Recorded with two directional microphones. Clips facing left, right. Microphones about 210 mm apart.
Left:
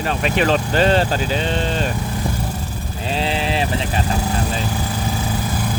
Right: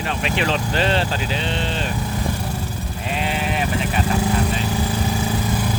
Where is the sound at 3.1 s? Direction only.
30° left (ahead or behind).